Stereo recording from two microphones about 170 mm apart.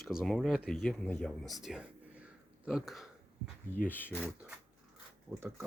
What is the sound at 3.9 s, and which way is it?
Speech, 10° left (ahead or behind).